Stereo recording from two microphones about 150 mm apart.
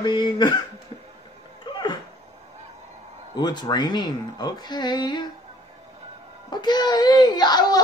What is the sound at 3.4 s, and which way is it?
Mantra, 30° left (ahead or behind).